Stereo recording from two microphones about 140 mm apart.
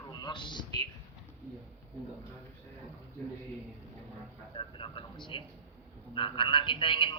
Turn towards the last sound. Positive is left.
turn(degrees=35)  # may be behind; listen again after turning